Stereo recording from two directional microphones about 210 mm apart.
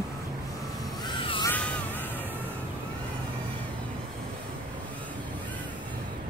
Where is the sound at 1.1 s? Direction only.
20° left (ahead or behind).